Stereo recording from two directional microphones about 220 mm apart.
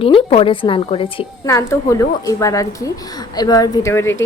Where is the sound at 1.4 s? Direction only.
15° left (ahead or behind).